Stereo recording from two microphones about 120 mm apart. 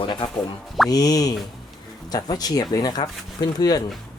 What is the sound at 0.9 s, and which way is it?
Speech, 30° left (ahead or behind).